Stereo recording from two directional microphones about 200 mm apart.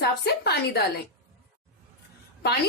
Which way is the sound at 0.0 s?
55° left (ahead or behind).